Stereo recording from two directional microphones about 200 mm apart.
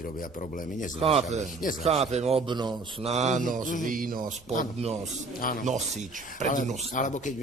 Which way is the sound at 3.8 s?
45° right (ahead or behind).